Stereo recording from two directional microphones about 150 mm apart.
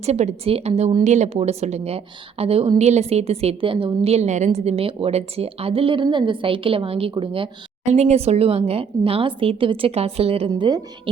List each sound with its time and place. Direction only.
0.0 s a woman's voice: 45° right (ahead or behind)
1.0 s a woman's voice: 50° right (ahead or behind); by 7.5 s 35° right (ahead or behind)
7.9 s a woman's voice: 45° right (ahead or behind)